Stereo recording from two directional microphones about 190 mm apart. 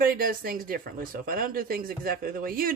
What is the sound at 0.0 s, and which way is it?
Speech, 50° right (ahead or behind).